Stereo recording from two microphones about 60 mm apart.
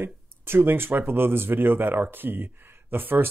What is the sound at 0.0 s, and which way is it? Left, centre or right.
Speech, right.